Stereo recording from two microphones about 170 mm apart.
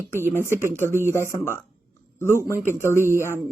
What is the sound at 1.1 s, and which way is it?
A woman's voice, 15° left (ahead or behind).